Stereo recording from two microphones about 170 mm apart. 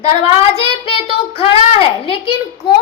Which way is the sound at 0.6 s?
35° left (ahead or behind).